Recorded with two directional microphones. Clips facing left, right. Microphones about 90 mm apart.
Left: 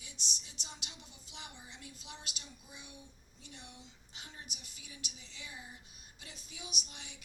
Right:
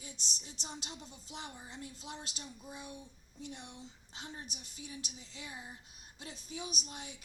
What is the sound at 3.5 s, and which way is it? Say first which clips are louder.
Speech: right 5 dB; 25° right (ahead or behind).